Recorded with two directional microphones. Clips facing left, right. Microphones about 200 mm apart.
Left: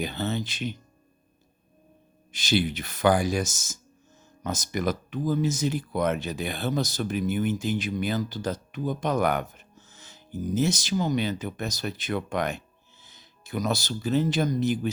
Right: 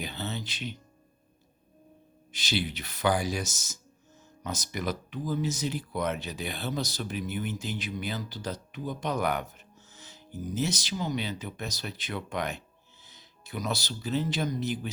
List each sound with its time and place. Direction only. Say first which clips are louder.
0.0 s speech: left 7 dB; 50° left (ahead or behind)
2.3 s speech: left 6 dB; 50° left (ahead or behind)